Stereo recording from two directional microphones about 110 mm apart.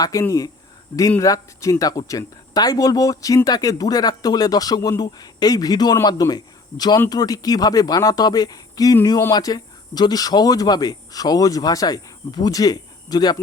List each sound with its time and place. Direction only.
0.0 s speech: 30° left (ahead or behind)